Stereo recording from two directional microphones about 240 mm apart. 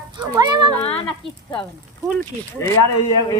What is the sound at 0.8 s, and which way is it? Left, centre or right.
Speech, left.